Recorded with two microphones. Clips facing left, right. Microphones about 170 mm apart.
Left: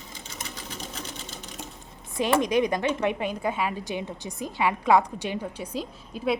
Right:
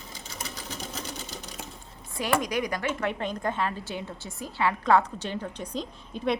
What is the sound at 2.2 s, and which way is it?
Speech, 20° left (ahead or behind).